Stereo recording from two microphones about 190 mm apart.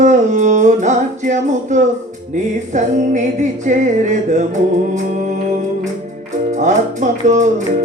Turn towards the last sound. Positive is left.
turn(degrees=-40)  # may be behind; listen again after turning